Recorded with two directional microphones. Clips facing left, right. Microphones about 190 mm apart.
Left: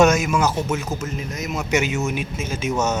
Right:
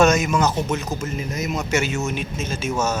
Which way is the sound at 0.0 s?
5° left (ahead or behind).